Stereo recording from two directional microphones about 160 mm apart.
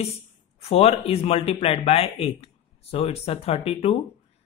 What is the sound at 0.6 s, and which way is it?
Speech, 40° left (ahead or behind).